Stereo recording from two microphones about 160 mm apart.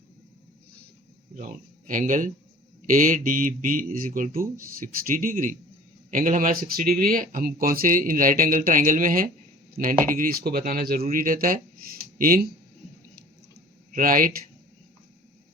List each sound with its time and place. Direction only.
1.4 s speech: 55° right (ahead or behind)
13.9 s speech: 60° right (ahead or behind)